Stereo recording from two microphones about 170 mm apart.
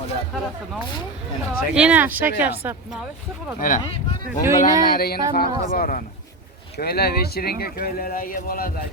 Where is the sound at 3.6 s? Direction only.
55° left (ahead or behind).